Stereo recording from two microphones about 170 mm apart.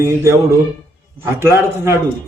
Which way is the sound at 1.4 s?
15° right (ahead or behind).